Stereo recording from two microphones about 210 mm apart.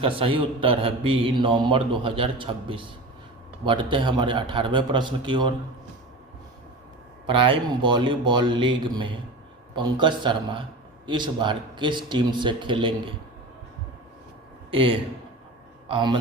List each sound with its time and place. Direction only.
0.0 s a man's voice: 25° right (ahead or behind)
7.3 s a man's voice: 25° right (ahead or behind)
14.7 s a man's voice: 25° right (ahead or behind)